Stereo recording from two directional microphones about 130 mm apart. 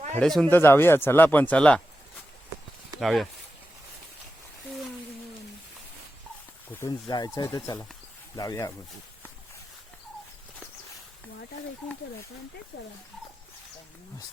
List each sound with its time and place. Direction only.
0.1 s speech: 5° left (ahead or behind)
0.5 s speech: 15° left (ahead or behind)
3.0 s speech: centre (ahead or behind)
6.7 s speech: 30° left (ahead or behind)